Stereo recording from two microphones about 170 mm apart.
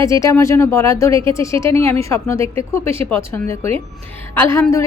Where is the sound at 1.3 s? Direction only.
15° left (ahead or behind).